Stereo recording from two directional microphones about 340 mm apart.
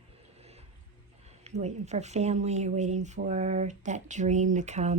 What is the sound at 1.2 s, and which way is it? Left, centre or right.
Speech, centre.